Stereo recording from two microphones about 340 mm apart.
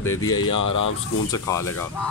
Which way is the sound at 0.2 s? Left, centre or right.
Left.